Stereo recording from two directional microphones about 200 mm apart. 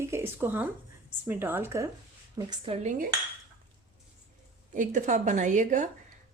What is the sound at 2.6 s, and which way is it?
Dishes, 30° right (ahead or behind).